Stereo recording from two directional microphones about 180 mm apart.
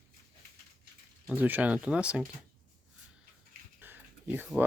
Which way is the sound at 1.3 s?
10° right (ahead or behind).